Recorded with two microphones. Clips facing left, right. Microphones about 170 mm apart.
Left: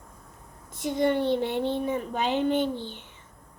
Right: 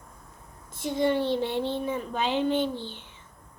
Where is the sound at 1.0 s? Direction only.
55° left (ahead or behind).